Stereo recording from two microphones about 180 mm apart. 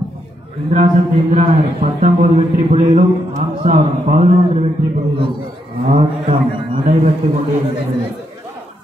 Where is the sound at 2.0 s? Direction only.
45° right (ahead or behind).